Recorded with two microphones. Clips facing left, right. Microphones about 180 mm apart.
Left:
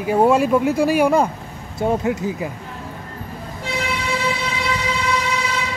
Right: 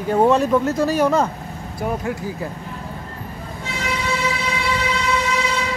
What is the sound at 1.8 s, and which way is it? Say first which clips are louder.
Speech: left 5 dB; 20° left (ahead or behind).